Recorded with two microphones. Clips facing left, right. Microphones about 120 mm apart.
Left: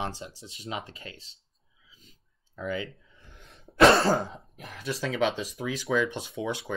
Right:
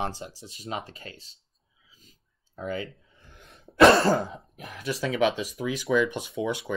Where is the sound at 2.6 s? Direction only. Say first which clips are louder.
Even; 40° right (ahead or behind).